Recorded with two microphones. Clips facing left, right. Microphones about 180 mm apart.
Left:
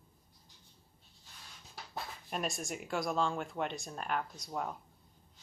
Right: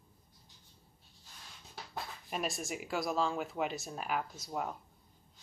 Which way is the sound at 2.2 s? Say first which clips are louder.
Even; centre (ahead or behind).